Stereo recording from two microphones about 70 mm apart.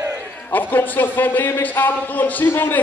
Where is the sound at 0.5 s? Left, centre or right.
Left.